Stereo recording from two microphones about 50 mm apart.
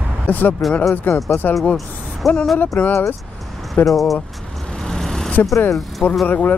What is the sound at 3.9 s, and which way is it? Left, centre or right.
Speech, centre.